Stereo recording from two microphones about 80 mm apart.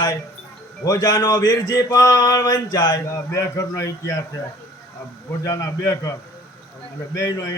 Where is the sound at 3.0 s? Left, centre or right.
Left.